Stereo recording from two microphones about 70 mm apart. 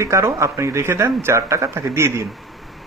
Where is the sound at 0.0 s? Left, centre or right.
Right.